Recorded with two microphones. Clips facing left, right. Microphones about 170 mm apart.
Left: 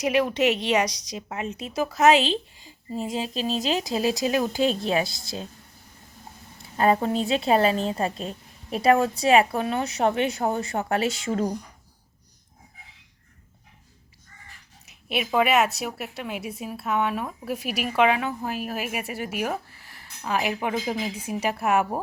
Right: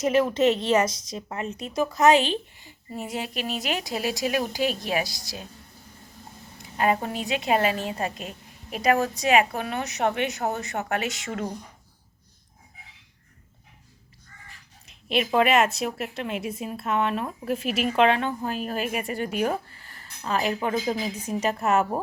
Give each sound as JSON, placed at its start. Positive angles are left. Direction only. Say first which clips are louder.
{"t": 0.0, "sound": "a woman's voice", "louder": "right 1 dB", "side_deg": 0}
{"t": 1.1, "sound": "speech", "louder": "even", "side_deg": 20}
{"t": 3.2, "sound": "speech", "louder": "left 3 dB", "side_deg": 30}
{"t": 6.6, "sound": "a woman's voice", "louder": "left 3 dB", "side_deg": 35}
{"t": 15.1, "sound": "a woman's voice", "louder": "right 1 dB", "side_deg": 5}